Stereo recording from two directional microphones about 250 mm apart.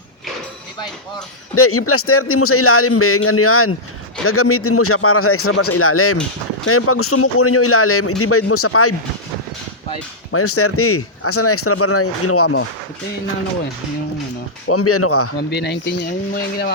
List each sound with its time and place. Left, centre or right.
1.5 s speech: left
10.3 s speech: left
14.7 s speech: left
15.4 s speech: left